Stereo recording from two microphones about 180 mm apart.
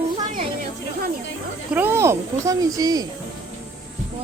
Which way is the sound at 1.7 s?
10° right (ahead or behind).